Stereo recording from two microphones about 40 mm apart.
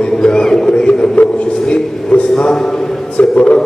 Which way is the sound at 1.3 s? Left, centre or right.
Left.